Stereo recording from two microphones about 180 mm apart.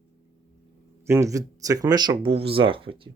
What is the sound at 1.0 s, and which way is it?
Speech, 15° right (ahead or behind).